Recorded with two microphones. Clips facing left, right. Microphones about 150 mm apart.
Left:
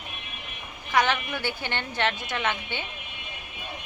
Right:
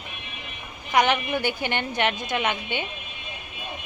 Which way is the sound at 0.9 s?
15° right (ahead or behind).